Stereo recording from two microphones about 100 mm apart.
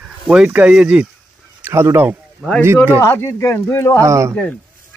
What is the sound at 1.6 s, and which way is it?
Speech, 25° right (ahead or behind).